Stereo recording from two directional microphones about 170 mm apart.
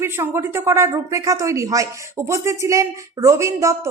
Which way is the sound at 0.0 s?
15° right (ahead or behind).